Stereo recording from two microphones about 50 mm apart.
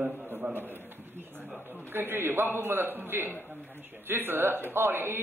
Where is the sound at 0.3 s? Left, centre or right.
Right.